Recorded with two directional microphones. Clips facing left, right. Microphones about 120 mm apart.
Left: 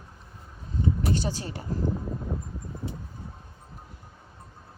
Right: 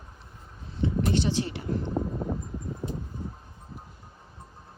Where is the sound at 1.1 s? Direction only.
40° left (ahead or behind).